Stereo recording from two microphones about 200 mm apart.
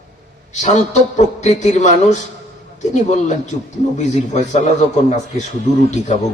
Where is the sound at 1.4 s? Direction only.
35° left (ahead or behind).